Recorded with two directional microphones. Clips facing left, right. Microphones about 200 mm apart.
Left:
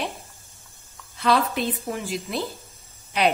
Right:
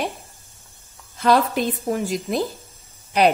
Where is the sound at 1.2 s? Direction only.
45° right (ahead or behind).